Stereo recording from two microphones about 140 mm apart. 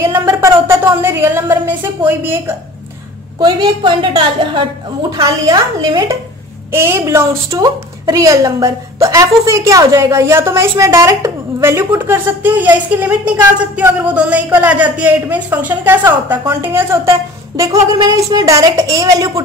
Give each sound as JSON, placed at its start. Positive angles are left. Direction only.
{"t": 0.0, "sound": "a woman's voice", "side_deg": -20}
{"t": 3.3, "sound": "a woman's voice", "side_deg": -30}